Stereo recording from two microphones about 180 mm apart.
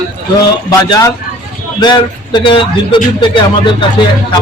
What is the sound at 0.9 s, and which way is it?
Speech, 20° left (ahead or behind).